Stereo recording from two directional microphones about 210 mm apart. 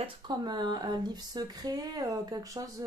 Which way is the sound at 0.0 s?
20° right (ahead or behind).